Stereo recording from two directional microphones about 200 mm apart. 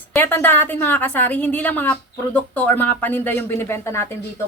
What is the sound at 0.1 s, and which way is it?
A woman's voice, 10° left (ahead or behind).